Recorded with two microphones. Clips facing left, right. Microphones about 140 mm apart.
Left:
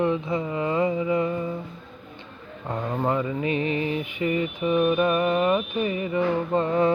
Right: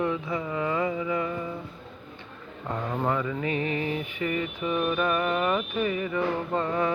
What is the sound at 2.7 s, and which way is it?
Mantra, 15° left (ahead or behind).